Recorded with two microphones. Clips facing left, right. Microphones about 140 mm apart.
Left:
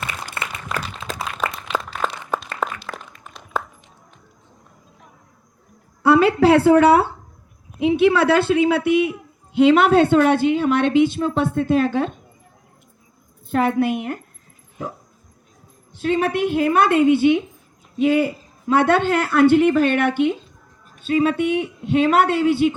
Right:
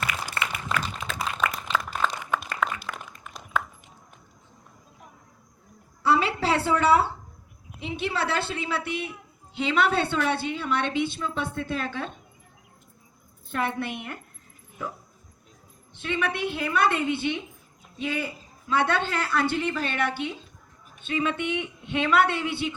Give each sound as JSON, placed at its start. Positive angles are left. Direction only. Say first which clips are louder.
{"t": 1.0, "sound": "a sound", "louder": "left 4 dB", "side_deg": 5}
{"t": 2.6, "sound": "a sound", "louder": "left 2 dB", "side_deg": 35}
{"t": 6.0, "sound": "a man's voice", "louder": "left 9 dB", "side_deg": 55}
{"t": 13.5, "sound": "a man's voice", "louder": "left 10 dB", "side_deg": 45}
{"t": 16.0, "sound": "a man's voice", "louder": "left 9 dB", "side_deg": 40}
{"t": 21.0, "sound": "a woman's voice", "louder": "left 9 dB", "side_deg": 40}